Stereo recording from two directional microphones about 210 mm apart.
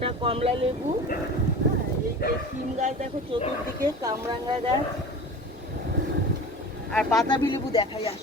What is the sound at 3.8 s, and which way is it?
Speech, 15° right (ahead or behind).